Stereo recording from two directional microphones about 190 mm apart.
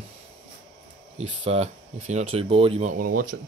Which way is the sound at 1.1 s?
35° right (ahead or behind).